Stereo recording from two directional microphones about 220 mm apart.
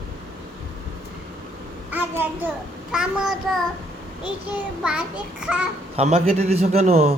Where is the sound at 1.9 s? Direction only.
10° right (ahead or behind).